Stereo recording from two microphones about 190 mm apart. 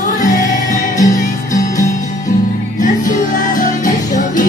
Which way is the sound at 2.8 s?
40° left (ahead or behind).